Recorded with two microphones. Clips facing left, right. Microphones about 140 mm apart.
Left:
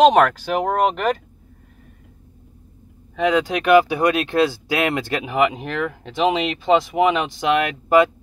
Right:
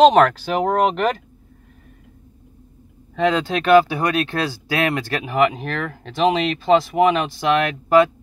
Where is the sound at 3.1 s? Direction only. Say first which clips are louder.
Even; 10° left (ahead or behind).